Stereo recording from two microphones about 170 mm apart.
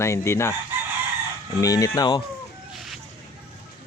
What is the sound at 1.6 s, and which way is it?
Speech, 20° left (ahead or behind).